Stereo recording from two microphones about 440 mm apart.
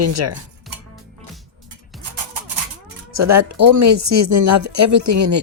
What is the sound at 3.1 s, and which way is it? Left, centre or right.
Speech, right.